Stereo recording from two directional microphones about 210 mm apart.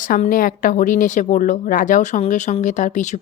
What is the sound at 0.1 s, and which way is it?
A woman's voice, 40° left (ahead or behind).